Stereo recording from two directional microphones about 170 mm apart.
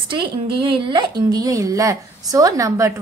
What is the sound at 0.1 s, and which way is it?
A woman's voice, 30° right (ahead or behind).